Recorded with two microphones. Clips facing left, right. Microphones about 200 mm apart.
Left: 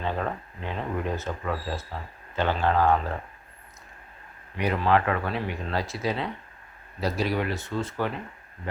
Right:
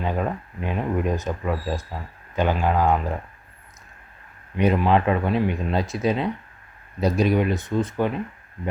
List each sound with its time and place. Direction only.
0.0 s speech: 15° right (ahead or behind)
4.5 s speech: 20° right (ahead or behind)